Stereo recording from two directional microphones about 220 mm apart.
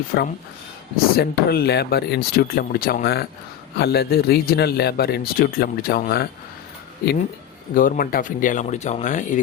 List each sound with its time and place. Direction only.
0.1 s speech: 45° left (ahead or behind)
7.8 s speech: 40° left (ahead or behind)